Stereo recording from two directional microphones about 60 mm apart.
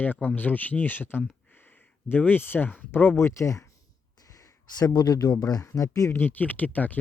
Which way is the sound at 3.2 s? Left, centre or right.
Left.